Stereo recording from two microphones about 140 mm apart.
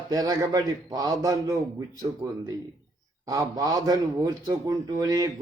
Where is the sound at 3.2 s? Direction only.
25° right (ahead or behind).